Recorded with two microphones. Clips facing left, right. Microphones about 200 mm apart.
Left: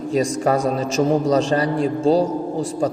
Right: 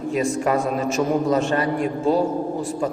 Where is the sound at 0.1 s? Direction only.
35° left (ahead or behind).